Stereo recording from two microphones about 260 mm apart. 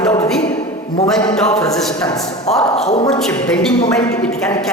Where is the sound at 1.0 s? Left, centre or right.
Centre.